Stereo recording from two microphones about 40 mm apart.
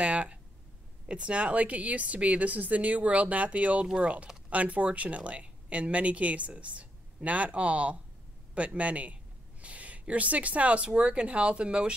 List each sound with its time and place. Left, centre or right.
0.0 s speech: right
3.8 s speech: right
4.5 s speech: right